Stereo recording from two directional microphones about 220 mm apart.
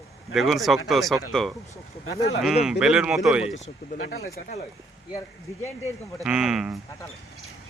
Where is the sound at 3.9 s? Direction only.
40° left (ahead or behind).